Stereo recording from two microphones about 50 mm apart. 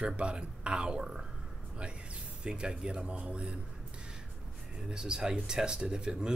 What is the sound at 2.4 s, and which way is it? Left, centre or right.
Speech, centre.